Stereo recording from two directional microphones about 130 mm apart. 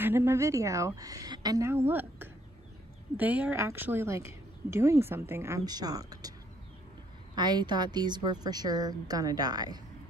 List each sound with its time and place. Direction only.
0.0 s a woman's voice: 20° right (ahead or behind)
5.7 s a woman's voice: 30° right (ahead or behind)
7.3 s a woman's voice: 35° right (ahead or behind)